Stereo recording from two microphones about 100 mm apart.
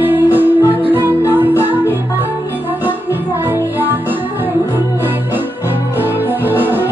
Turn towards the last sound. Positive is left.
turn(degrees=-20)  # may be behind; listen again after turning